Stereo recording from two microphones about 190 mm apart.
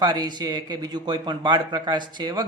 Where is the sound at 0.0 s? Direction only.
20° right (ahead or behind).